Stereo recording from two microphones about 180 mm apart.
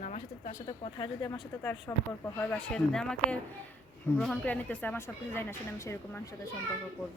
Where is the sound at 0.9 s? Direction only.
20° left (ahead or behind).